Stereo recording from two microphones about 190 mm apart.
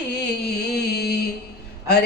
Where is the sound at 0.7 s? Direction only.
60° left (ahead or behind).